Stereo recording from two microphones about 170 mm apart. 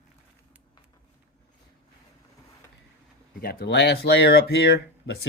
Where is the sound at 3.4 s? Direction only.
65° left (ahead or behind).